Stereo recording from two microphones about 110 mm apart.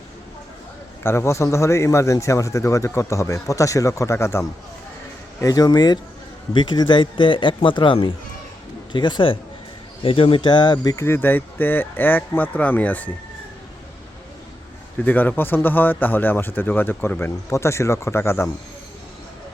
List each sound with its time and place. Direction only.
1.0 s a man's voice: 25° left (ahead or behind); by 10.9 s 40° left (ahead or behind)
10.9 s speech: 25° left (ahead or behind)
15.0 s a man's voice: 15° left (ahead or behind)